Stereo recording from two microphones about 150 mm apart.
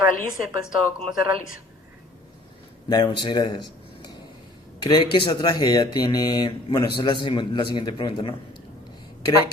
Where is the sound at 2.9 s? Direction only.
30° left (ahead or behind).